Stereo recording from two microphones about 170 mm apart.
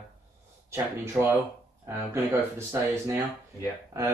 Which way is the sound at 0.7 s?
15° right (ahead or behind).